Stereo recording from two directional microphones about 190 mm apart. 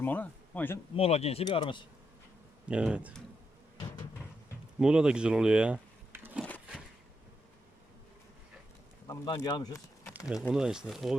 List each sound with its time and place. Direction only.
0.0 s speech: 10° left (ahead or behind)
0.9 s speech: 35° left (ahead or behind)
2.6 s speech: 5° right (ahead or behind)
4.8 s speech: 5° right (ahead or behind)
9.0 s speech: 20° left (ahead or behind)
10.5 s speech: 5° right (ahead or behind)